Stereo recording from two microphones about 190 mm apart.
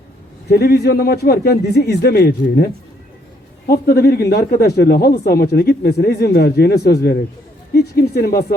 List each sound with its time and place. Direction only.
0.5 s speech: 55° left (ahead or behind)
3.7 s speech: 55° left (ahead or behind)